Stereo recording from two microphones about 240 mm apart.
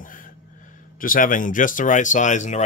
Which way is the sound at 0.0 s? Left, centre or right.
Left.